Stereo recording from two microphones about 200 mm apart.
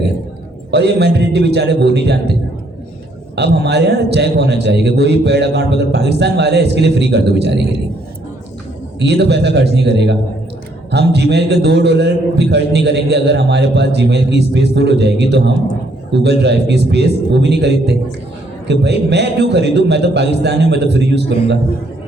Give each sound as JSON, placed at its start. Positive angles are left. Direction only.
{"t": 0.7, "sound": "a man's voice", "side_deg": -55}
{"t": 3.3, "sound": "a man's voice", "side_deg": -55}
{"t": 9.0, "sound": "a man's voice", "side_deg": -55}